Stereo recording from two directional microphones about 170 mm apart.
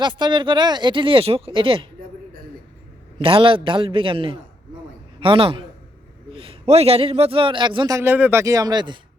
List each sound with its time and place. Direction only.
0.0 s a man's voice: 25° right (ahead or behind)
3.2 s a man's voice: 30° right (ahead or behind)